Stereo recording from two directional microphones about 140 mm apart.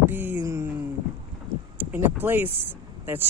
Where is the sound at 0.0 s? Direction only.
15° right (ahead or behind).